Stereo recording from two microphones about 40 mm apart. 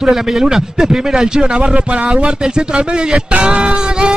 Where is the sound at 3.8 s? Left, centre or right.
Right.